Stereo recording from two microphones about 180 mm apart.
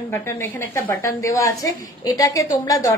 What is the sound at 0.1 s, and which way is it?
A woman's voice, 15° left (ahead or behind).